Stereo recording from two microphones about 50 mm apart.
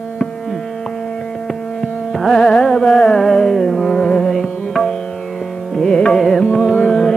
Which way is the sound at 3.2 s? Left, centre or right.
Centre.